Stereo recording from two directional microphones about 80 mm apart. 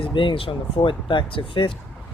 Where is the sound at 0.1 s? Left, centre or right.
Left.